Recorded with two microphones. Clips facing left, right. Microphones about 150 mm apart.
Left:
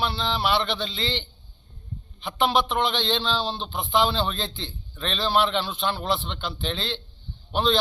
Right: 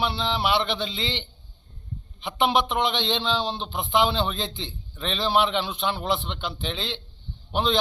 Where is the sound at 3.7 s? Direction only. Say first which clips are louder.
Even; centre (ahead or behind).